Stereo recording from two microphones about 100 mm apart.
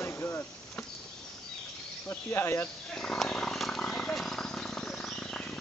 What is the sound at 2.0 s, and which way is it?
Speech, 25° left (ahead or behind).